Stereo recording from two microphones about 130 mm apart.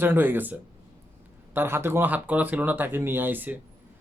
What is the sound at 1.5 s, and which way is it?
Speech, 20° right (ahead or behind).